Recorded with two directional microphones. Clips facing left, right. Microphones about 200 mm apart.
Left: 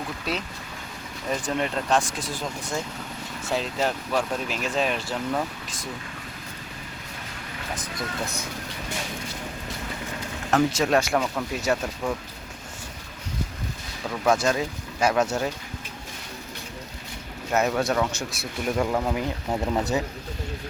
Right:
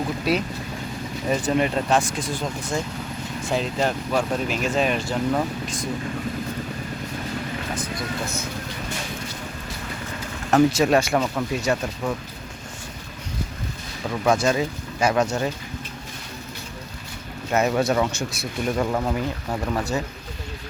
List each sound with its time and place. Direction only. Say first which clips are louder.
0.3 s speech: right 8 dB; 10° right (ahead or behind)
10.7 s speech: right 3 dB; 5° right (ahead or behind)
14.1 s speech: right 2 dB; centre (ahead or behind)
17.5 s speech: right 2 dB; centre (ahead or behind)
17.8 s speech: right 3 dB; 10° right (ahead or behind)
18.1 s speech: right 3 dB; centre (ahead or behind)
19.5 s speech: left 3 dB; 20° left (ahead or behind)